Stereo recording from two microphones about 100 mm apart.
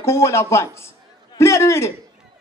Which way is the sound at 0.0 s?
25° left (ahead or behind).